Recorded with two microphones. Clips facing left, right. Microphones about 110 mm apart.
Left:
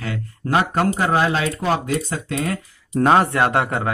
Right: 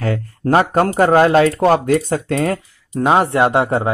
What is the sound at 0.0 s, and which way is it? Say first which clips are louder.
Speech: right 8 dB; 40° right (ahead or behind).